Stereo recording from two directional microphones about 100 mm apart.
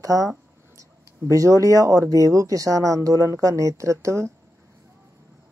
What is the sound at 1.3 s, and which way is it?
Speech, 35° right (ahead or behind).